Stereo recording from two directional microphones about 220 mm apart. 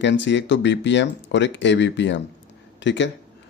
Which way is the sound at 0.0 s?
55° left (ahead or behind).